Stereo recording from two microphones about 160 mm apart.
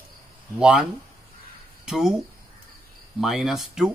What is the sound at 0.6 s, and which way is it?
Speech, 5° right (ahead or behind).